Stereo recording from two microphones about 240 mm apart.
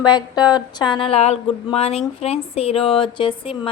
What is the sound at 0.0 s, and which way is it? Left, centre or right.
A woman's voice, centre.